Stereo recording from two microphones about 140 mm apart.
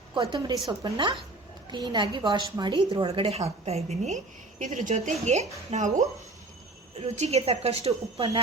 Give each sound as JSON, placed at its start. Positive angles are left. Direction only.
{"t": 0.1, "sound": "a woman's voice", "side_deg": -35}
{"t": 4.6, "sound": "speech", "side_deg": -65}
{"t": 5.2, "sound": "a woman's voice", "side_deg": -55}